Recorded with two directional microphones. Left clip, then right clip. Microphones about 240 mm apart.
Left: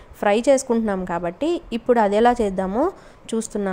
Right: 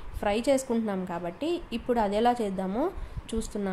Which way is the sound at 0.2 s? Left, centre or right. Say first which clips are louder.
Left 9 dB; left.